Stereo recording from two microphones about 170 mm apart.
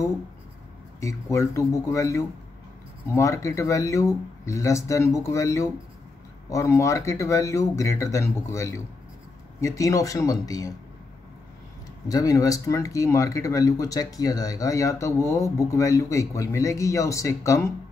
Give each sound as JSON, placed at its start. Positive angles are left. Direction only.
{"t": 1.0, "sound": "speech", "side_deg": 15}
{"t": 12.1, "sound": "speech", "side_deg": 20}